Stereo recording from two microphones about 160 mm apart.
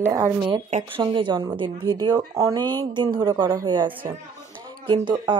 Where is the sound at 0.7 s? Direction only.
35° right (ahead or behind).